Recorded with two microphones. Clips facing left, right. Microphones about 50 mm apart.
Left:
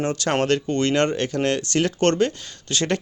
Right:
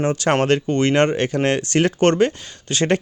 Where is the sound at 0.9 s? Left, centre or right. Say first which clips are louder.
Right 3 dB; right.